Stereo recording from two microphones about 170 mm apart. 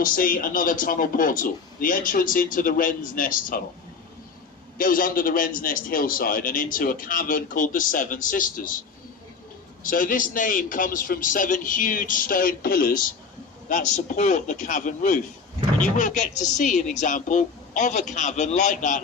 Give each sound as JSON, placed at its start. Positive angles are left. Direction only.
{"t": 0.0, "sound": "speech", "side_deg": 55}
{"t": 4.8, "sound": "a man's voice", "side_deg": 55}
{"t": 9.9, "sound": "speech", "side_deg": 55}